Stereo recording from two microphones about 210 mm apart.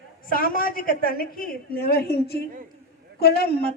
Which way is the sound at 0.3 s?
45° left (ahead or behind).